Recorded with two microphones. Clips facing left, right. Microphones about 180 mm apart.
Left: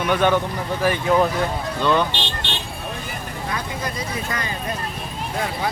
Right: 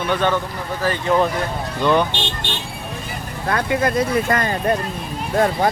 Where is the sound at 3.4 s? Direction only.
65° right (ahead or behind).